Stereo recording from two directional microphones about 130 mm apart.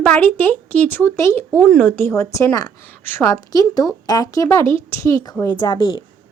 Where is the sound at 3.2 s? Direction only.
30° left (ahead or behind).